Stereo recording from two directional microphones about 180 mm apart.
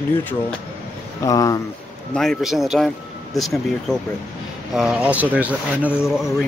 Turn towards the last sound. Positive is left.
turn(degrees=-5)  # may be behind; listen again after turning